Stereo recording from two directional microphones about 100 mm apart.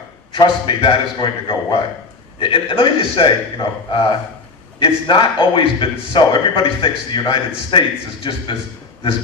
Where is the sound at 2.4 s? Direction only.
60° left (ahead or behind).